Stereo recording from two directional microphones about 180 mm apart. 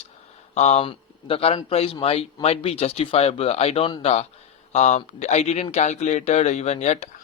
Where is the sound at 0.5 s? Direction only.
40° left (ahead or behind).